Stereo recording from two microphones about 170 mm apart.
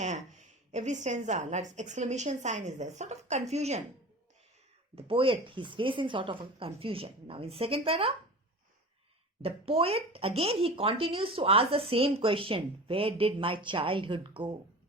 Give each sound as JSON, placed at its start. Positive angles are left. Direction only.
{"t": 0.0, "sound": "a woman's voice", "side_deg": -45}
{"t": 4.9, "sound": "speech", "side_deg": -35}
{"t": 9.4, "sound": "speech", "side_deg": -35}